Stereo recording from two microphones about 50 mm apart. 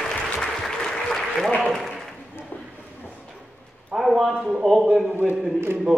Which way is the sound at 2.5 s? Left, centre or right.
Left.